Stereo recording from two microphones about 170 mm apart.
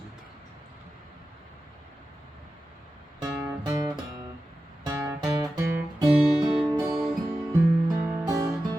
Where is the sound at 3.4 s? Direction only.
15° right (ahead or behind).